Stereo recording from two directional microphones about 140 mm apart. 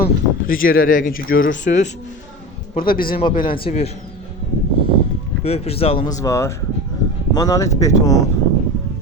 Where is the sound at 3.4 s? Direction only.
40° left (ahead or behind).